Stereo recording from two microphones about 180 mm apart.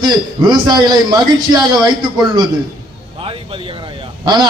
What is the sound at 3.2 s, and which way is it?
Speech, 30° right (ahead or behind).